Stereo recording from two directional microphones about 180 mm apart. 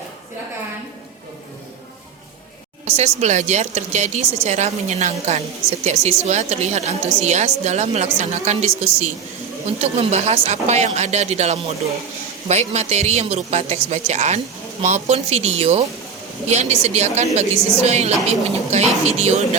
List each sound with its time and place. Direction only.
2.8 s speech: 35° right (ahead or behind)
9.7 s speech: 35° right (ahead or behind)